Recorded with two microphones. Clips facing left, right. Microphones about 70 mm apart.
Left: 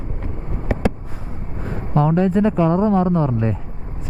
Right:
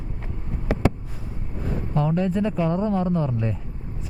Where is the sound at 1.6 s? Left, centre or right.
Left.